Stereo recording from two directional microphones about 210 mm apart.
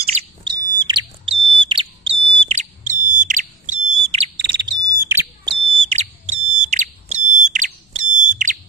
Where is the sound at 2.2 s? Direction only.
25° right (ahead or behind).